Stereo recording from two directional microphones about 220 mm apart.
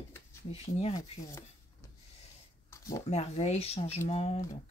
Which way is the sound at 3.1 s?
30° left (ahead or behind).